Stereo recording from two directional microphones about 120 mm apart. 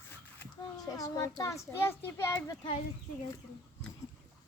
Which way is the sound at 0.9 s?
30° left (ahead or behind).